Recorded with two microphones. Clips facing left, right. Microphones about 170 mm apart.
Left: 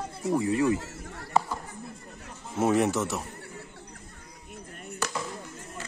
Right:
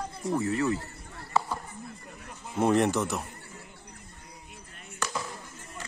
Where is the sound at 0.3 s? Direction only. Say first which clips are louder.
Left 3 dB; 15° left (ahead or behind).